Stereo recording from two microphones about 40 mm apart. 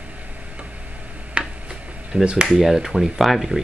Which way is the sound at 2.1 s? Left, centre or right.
Right.